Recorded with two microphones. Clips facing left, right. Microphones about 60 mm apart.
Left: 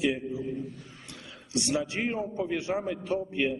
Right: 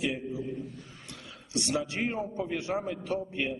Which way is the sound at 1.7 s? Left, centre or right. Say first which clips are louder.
Left 1 dB; left.